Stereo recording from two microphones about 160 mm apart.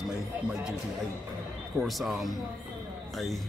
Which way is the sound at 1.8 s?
Centre (ahead or behind).